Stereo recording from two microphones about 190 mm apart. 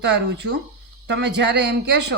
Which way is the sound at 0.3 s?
65° right (ahead or behind).